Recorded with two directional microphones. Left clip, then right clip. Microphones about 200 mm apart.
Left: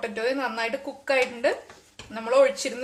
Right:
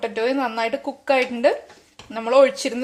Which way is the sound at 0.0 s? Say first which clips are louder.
Right 5 dB; 35° right (ahead or behind).